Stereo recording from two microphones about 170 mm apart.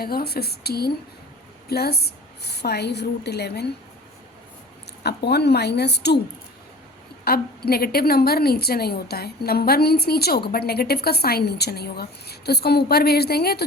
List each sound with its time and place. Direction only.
0.0 s a woman's voice: 65° left (ahead or behind)
5.0 s a woman's voice: 75° left (ahead or behind)
7.3 s a woman's voice: 65° left (ahead or behind)